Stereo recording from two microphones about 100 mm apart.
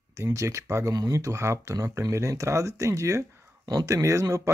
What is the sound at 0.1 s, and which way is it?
Speech, 30° right (ahead or behind).